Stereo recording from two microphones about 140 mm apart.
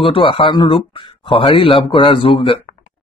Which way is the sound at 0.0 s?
40° left (ahead or behind).